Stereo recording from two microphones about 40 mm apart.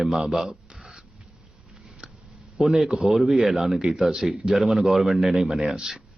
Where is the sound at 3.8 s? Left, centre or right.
Centre.